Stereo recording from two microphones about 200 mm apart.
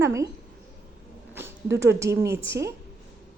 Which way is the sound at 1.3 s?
15° right (ahead or behind).